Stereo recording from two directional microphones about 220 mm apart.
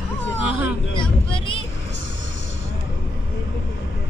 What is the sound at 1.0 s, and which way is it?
Speech, 20° left (ahead or behind).